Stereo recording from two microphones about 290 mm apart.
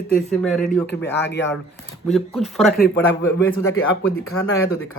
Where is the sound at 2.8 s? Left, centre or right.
Left.